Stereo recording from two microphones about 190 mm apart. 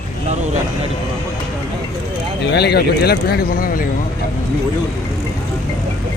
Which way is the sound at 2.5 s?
60° left (ahead or behind).